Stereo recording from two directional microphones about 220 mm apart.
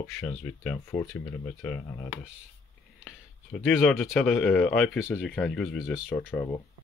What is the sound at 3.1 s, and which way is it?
Speech, centre (ahead or behind).